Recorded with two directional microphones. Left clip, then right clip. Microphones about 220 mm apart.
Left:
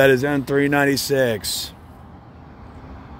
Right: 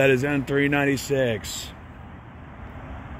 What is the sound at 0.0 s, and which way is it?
Speech, 25° left (ahead or behind).